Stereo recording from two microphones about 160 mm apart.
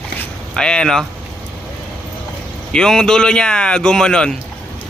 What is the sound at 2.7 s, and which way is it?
Speech, 5° left (ahead or behind).